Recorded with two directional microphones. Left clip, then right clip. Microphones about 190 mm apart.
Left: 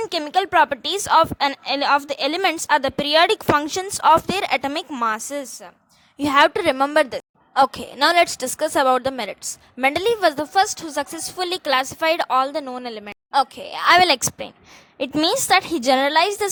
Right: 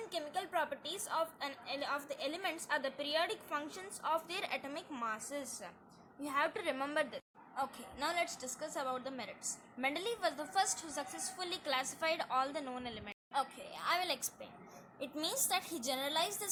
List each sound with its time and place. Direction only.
0.0 s a woman's voice: 45° left (ahead or behind)